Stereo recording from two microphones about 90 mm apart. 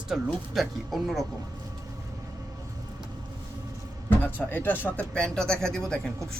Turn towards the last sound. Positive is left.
turn(degrees=5)  # may be behind; listen again after turning